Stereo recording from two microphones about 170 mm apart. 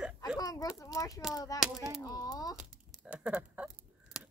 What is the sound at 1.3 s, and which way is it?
Speech, 20° left (ahead or behind).